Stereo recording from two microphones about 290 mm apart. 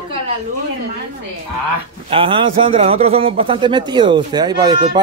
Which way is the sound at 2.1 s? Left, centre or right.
Centre.